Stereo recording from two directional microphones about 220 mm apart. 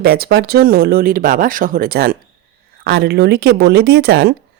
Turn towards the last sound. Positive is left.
turn(degrees=-50)  # may be behind; listen again after turning